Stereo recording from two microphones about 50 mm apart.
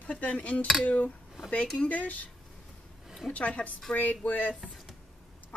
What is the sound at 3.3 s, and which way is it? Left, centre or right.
Speech, left.